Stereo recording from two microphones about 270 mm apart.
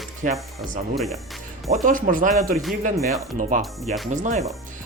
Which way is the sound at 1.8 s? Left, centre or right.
Right.